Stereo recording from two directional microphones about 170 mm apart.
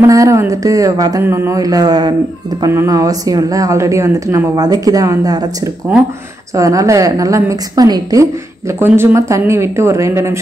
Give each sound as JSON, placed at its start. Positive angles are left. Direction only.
{"t": 0.0, "sound": "speech", "side_deg": -20}
{"t": 6.5, "sound": "a woman's voice", "side_deg": -20}